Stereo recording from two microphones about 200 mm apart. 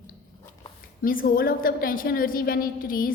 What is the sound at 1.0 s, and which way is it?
A woman's voice, 45° left (ahead or behind).